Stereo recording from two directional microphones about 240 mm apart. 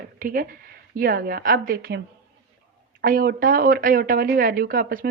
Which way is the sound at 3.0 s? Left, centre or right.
Right.